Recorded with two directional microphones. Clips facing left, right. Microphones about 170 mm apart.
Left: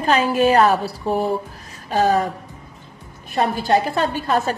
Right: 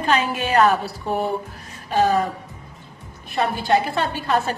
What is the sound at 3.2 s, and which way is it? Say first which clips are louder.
A woman's voice: left 2 dB; 40° left (ahead or behind).